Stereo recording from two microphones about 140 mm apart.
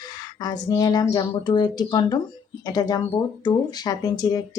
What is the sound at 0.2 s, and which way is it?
Speech, 30° left (ahead or behind).